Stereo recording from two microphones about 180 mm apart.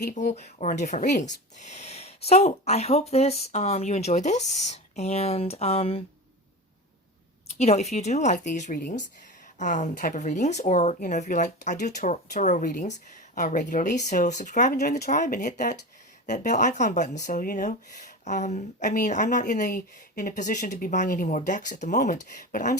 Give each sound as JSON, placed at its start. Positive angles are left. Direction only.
{"t": 0.0, "sound": "speech", "side_deg": 45}
{"t": 7.6, "sound": "speech", "side_deg": 35}
{"t": 14.8, "sound": "speech", "side_deg": 60}
{"t": 15.0, "sound": "speech", "side_deg": 45}